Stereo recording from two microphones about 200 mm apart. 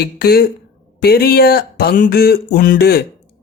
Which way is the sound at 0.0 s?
50° left (ahead or behind).